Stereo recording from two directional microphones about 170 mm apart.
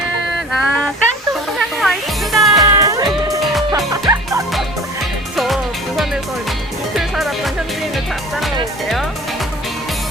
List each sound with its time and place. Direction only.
0.5 s a sound: centre (ahead or behind)
1.5 s music: centre (ahead or behind)
2.6 s music: 20° right (ahead or behind)